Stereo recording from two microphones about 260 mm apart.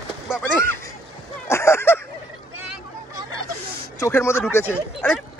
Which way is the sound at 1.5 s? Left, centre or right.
Centre.